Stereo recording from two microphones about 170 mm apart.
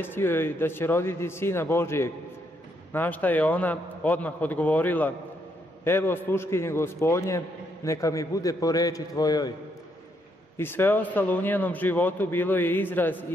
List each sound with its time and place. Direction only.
0.0 s a man's voice: 10° left (ahead or behind)
10.6 s speech: 15° left (ahead or behind)